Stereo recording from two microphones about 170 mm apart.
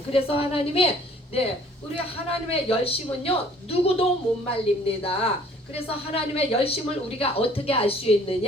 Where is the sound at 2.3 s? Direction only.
35° left (ahead or behind).